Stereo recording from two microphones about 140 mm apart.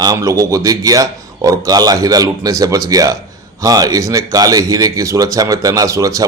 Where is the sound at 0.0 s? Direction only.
25° right (ahead or behind).